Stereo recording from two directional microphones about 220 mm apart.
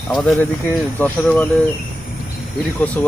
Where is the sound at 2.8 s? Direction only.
5° left (ahead or behind).